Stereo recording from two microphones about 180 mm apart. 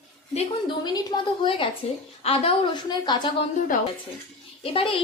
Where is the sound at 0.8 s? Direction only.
20° left (ahead or behind).